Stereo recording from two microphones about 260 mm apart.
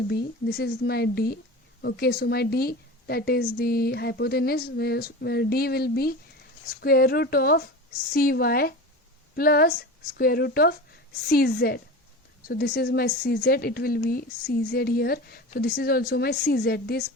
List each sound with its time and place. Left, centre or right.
0.1 s a woman's voice: left